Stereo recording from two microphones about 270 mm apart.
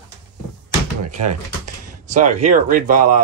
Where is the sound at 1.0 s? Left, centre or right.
Right.